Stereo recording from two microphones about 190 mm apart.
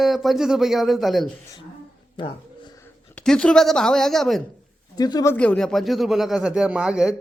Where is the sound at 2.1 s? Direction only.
25° left (ahead or behind).